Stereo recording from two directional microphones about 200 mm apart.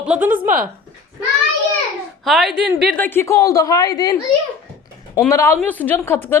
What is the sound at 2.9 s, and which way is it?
A woman's voice, 10° left (ahead or behind).